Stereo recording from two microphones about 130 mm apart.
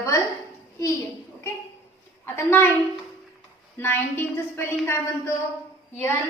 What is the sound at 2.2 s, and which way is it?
Speech, 15° left (ahead or behind).